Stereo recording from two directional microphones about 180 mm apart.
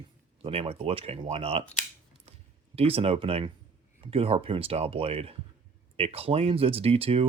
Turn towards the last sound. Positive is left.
turn(degrees=-30)  # may be behind; listen again after turning